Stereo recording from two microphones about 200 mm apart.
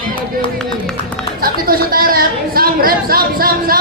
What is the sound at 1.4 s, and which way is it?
A woman's voice, 45° right (ahead or behind).